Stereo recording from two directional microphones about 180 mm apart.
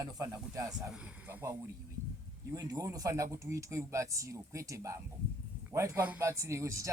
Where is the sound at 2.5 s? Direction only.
20° right (ahead or behind).